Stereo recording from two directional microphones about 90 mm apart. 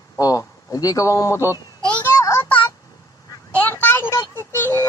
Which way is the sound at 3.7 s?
25° left (ahead or behind).